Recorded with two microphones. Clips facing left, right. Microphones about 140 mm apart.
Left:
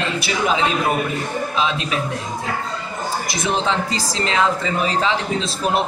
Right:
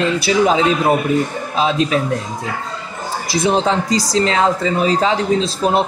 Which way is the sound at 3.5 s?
35° right (ahead or behind).